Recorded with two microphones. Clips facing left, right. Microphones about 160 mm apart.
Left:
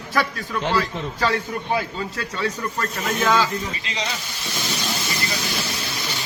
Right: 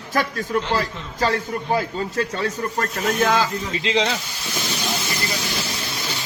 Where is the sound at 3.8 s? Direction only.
90° right.